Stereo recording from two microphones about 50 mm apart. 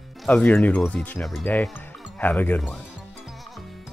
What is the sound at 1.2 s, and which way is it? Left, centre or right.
Speech, centre.